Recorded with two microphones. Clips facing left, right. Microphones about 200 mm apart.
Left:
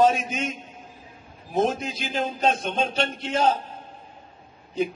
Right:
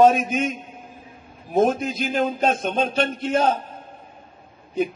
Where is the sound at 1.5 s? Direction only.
50° right (ahead or behind).